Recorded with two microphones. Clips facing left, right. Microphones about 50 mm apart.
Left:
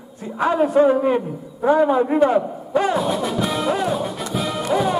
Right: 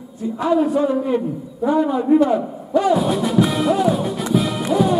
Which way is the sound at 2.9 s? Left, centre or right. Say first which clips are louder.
Right 4 dB; centre.